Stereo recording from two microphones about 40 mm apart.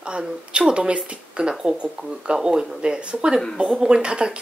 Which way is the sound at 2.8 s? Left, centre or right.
Right.